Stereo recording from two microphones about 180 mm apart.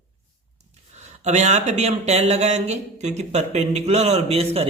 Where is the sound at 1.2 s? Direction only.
40° right (ahead or behind).